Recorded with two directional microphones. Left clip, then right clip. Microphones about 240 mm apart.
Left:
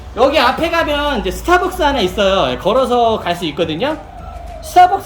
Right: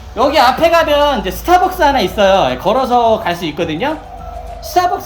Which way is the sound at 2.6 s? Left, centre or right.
Centre.